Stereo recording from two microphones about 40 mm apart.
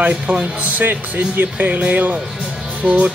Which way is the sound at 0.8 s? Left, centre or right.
Right.